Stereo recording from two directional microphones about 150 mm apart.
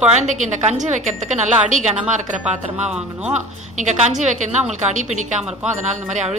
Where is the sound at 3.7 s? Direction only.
50° right (ahead or behind).